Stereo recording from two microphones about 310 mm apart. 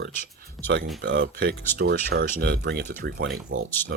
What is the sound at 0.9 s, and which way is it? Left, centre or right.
Speech, right.